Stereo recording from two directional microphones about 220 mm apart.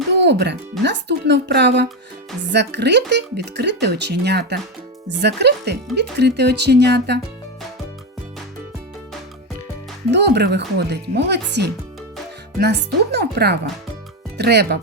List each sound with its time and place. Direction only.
0.1 s music: 50° right (ahead or behind)
0.8 s speech: 50° right (ahead or behind)
10.1 s speech: 50° right (ahead or behind)